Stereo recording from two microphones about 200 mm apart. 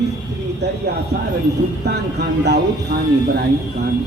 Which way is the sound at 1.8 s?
55° right (ahead or behind).